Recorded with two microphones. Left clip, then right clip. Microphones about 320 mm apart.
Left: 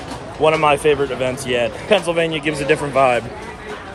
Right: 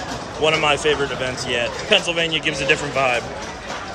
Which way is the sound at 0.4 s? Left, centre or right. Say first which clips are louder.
Left 3 dB; centre.